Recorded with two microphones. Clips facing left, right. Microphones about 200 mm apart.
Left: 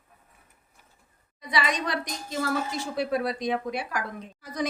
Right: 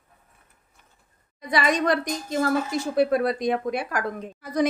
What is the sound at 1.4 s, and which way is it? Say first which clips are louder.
A woman's voice: right 5 dB; 50° right (ahead or behind).